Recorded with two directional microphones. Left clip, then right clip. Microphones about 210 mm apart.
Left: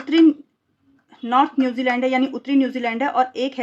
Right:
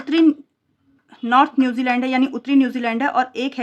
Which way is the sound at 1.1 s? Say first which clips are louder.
Right 2 dB; 35° right (ahead or behind).